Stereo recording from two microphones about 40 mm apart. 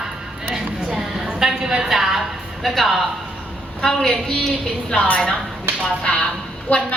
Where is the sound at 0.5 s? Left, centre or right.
Centre.